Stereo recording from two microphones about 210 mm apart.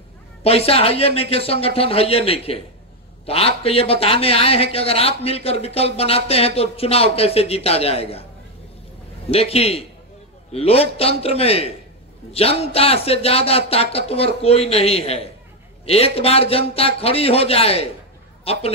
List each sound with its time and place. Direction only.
0.4 s speech: 30° left (ahead or behind)
9.3 s a man's voice: 30° left (ahead or behind)